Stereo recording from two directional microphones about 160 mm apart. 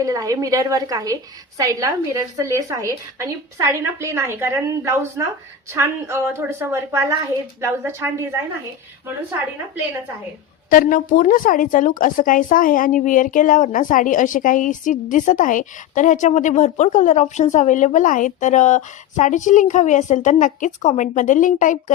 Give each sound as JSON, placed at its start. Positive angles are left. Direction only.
{"t": 0.0, "sound": "a woman's voice", "side_deg": -20}
{"t": 10.7, "sound": "a woman's voice", "side_deg": 60}